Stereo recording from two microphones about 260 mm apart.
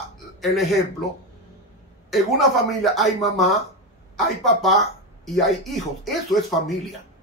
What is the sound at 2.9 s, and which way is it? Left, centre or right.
A man's voice, centre.